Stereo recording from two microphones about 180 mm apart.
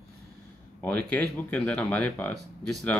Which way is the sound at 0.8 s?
10° left (ahead or behind).